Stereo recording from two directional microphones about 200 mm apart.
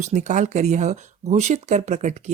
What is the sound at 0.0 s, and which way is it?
Speech, 35° right (ahead or behind).